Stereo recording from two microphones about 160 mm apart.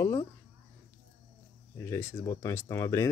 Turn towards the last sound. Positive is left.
turn(degrees=20)  # may be behind; listen again after turning